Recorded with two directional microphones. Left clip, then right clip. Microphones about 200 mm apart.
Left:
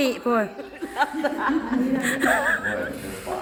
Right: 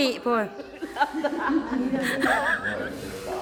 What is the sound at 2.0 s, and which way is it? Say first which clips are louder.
Speech: left 1 dB; centre (ahead or behind).